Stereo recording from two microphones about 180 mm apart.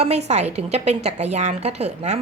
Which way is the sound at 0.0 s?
35° right (ahead or behind).